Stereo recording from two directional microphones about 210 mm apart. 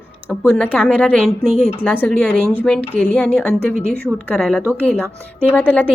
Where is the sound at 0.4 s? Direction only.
5° left (ahead or behind).